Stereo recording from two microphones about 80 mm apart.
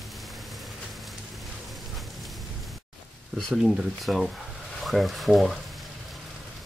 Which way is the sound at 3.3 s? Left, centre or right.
Centre.